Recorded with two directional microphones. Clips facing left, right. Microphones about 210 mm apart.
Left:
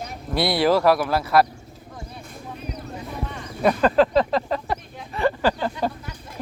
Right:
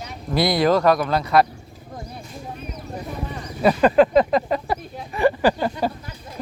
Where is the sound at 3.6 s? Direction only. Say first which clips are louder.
Right 2 dB; 10° right (ahead or behind).